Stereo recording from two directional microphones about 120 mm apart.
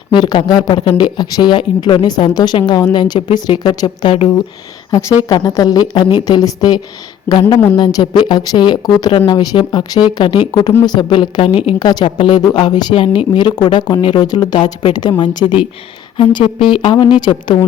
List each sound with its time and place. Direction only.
0.1 s speech: 40° left (ahead or behind)
4.9 s a woman's voice: 25° left (ahead or behind); by 11.6 s 45° left (ahead or behind)
11.8 s a woman's voice: 35° left (ahead or behind)